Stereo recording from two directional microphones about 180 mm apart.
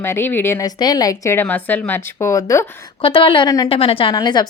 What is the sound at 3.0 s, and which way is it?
A woman's voice, 30° left (ahead or behind).